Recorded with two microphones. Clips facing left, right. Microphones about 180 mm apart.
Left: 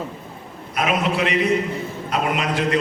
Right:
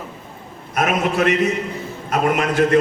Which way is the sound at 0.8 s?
50° right (ahead or behind).